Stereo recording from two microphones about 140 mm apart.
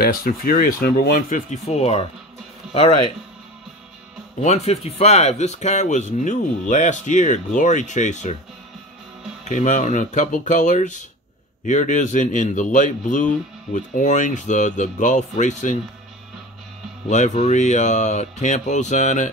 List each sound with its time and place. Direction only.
0.0 s speech: 90° left; by 2.0 s 50° left (ahead or behind)
2.6 s speech: 5° right (ahead or behind)
4.4 s speech: 55° left (ahead or behind)
9.4 s speech: 60° left (ahead or behind)
17.1 s speech: 55° left (ahead or behind)